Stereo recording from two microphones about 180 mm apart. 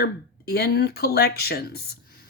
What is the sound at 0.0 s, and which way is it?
Speech, 60° left (ahead or behind).